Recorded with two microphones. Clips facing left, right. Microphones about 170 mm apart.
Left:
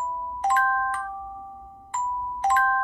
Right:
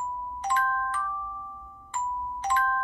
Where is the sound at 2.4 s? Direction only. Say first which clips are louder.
Left 5 dB; 50° left (ahead or behind).